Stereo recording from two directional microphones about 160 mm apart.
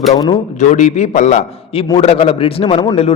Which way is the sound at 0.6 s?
50° left (ahead or behind).